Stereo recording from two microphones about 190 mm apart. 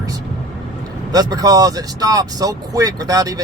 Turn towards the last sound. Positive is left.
turn(degrees=-20)  # may be behind; listen again after turning